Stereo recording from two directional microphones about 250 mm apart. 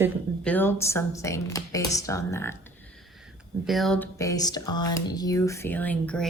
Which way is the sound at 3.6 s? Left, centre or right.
Centre.